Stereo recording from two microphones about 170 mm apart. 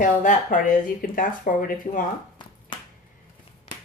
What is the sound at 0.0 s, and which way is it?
Speech, 50° left (ahead or behind).